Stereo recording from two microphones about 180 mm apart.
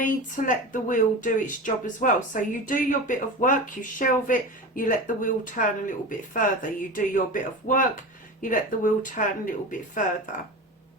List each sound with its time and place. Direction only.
0.0 s a woman's voice: 45° left (ahead or behind)